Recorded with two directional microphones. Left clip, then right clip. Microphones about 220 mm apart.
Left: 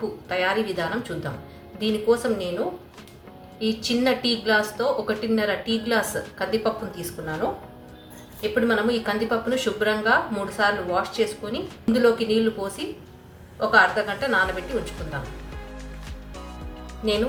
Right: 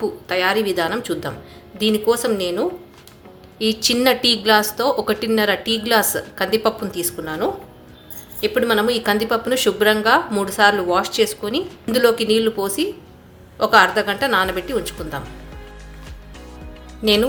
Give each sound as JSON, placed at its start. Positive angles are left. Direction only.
{"t": 0.3, "sound": "speech", "side_deg": -50}
{"t": 3.6, "sound": "speech", "side_deg": -50}
{"t": 8.4, "sound": "speech", "side_deg": -50}